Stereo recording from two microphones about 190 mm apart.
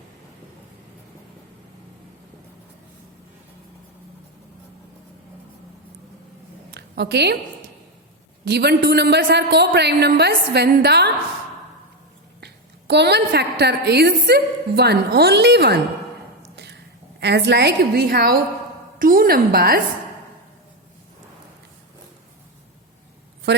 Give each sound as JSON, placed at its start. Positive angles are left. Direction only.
{"t": 6.7, "sound": "a sound", "side_deg": -60}
{"t": 8.4, "sound": "a woman's voice", "side_deg": -60}
{"t": 12.9, "sound": "a woman's voice", "side_deg": -60}
{"t": 17.2, "sound": "a woman's voice", "side_deg": -65}